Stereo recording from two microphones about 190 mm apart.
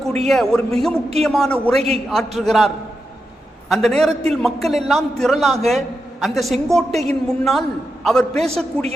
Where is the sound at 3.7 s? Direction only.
Centre (ahead or behind).